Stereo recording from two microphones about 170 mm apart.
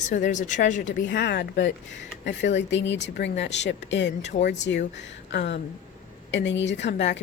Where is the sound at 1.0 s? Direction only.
90° left.